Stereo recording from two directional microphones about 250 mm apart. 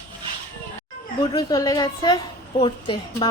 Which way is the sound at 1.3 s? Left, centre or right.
Centre.